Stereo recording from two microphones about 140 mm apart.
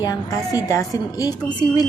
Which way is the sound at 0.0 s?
25° left (ahead or behind).